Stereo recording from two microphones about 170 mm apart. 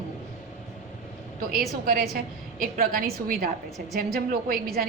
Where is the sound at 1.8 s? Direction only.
60° right (ahead or behind).